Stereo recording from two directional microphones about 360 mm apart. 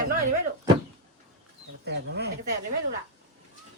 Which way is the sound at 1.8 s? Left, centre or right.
Right.